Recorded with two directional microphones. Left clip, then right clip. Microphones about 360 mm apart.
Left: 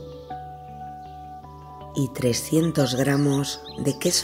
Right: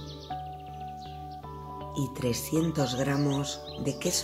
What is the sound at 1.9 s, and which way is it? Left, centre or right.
Speech, centre.